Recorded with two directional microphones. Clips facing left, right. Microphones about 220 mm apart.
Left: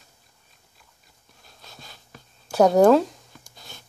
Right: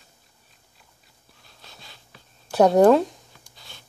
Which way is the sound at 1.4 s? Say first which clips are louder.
Left 2 dB; 45° left (ahead or behind).